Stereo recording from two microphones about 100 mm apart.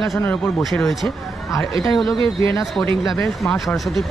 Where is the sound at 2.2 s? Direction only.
60° right (ahead or behind).